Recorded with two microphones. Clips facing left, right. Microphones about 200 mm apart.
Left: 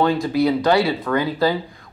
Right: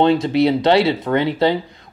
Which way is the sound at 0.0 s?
25° right (ahead or behind).